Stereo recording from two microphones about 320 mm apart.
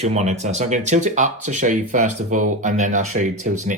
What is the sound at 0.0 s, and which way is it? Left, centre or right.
Speech, right.